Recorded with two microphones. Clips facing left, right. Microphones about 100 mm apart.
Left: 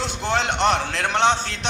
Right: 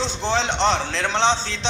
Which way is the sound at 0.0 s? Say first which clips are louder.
Right 1 dB; 30° right (ahead or behind).